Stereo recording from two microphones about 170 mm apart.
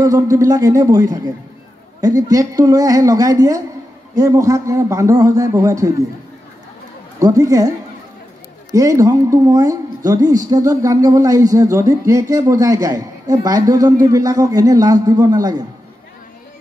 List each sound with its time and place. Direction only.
0.0 s a woman's voice: 20° right (ahead or behind)
7.2 s a woman's voice: 20° right (ahead or behind)
8.7 s a woman's voice: 20° right (ahead or behind)